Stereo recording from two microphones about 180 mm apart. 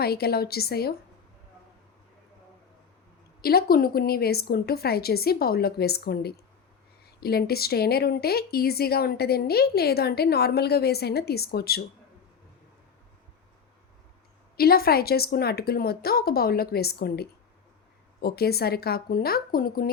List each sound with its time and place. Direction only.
0.0 s speech: 60° left (ahead or behind)
3.4 s speech: 55° left (ahead or behind)
14.5 s speech: 55° left (ahead or behind)